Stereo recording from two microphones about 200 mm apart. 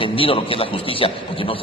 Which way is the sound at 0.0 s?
25° left (ahead or behind).